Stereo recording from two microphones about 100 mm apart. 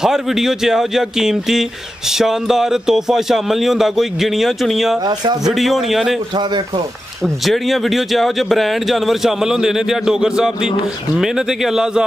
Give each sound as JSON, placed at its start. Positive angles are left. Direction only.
{"t": 0.0, "sound": "speech", "side_deg": -5}
{"t": 5.0, "sound": "speech", "side_deg": -45}
{"t": 5.4, "sound": "speech", "side_deg": 0}
{"t": 7.4, "sound": "speech", "side_deg": 0}